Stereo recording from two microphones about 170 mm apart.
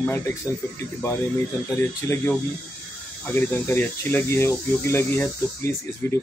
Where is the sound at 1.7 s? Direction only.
15° left (ahead or behind).